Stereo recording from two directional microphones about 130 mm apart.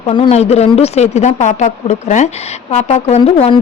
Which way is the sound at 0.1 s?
50° left (ahead or behind).